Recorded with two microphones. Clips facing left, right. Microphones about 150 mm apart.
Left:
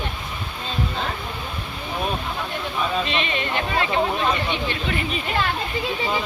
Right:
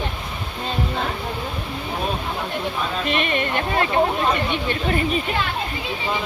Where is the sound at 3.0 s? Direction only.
50° right (ahead or behind).